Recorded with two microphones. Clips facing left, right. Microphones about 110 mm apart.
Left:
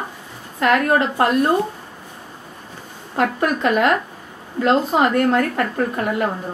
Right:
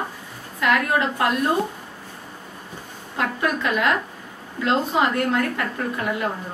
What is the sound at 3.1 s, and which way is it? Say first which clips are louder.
A woman's voice: left 5 dB; 45° left (ahead or behind).